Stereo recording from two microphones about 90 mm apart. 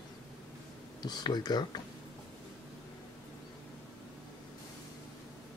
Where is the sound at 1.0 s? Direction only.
50° left (ahead or behind).